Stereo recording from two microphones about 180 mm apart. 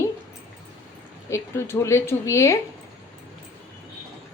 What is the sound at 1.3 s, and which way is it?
Speech, 15° left (ahead or behind).